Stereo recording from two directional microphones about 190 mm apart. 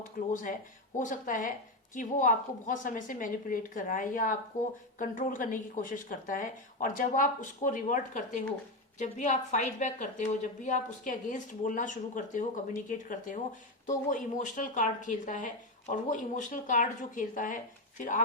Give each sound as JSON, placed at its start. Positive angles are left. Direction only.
{"t": 0.2, "sound": "a woman's voice", "side_deg": 45}